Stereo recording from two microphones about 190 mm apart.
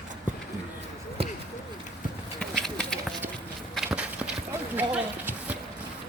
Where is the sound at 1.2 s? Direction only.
30° right (ahead or behind).